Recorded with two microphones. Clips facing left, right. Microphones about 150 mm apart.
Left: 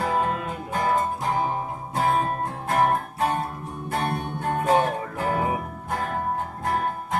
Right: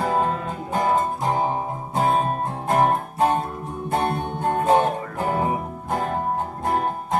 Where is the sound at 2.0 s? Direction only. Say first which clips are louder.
Right 2 dB; 25° right (ahead or behind).